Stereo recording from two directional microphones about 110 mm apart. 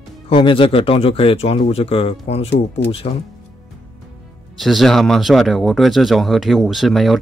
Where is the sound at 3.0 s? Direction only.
75° left (ahead or behind).